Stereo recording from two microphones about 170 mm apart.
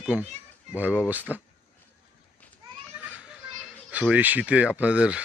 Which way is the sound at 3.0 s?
5° right (ahead or behind).